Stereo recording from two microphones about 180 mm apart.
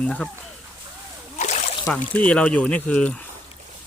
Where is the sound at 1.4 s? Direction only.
40° left (ahead or behind).